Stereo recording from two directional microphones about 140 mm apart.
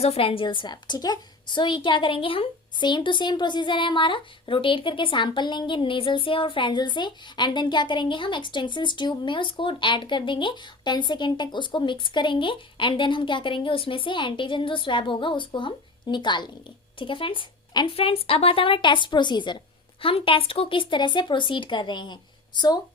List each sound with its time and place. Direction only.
0.0 s a woman's voice: 45° left (ahead or behind)